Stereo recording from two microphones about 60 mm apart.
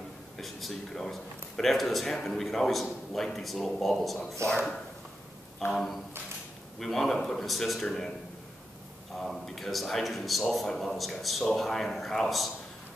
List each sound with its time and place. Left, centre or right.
0.4 s speech: centre
4.5 s speech: centre
5.7 s speech: centre
9.1 s speech: centre